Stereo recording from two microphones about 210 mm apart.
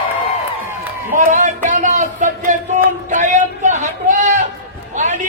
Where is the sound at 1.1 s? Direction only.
35° right (ahead or behind).